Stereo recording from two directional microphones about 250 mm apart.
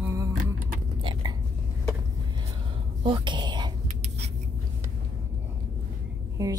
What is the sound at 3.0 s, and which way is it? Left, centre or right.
Whispering, centre.